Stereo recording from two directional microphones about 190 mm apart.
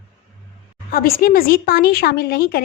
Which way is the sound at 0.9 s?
50° left (ahead or behind).